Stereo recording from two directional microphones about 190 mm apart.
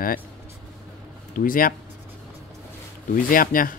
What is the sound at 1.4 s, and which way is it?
Speech, 45° left (ahead or behind).